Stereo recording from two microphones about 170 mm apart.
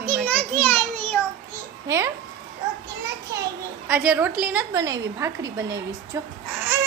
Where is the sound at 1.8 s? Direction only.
15° right (ahead or behind).